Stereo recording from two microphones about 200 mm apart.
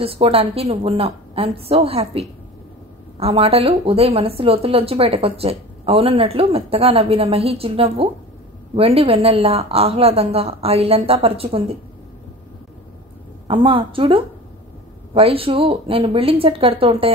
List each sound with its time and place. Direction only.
0.0 s a woman's voice: 30° right (ahead or behind)
13.5 s a woman's voice: 25° right (ahead or behind)